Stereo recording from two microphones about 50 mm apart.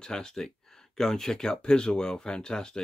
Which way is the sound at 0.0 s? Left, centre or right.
Centre.